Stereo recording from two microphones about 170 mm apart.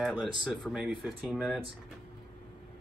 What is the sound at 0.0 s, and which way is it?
Speech, centre (ahead or behind).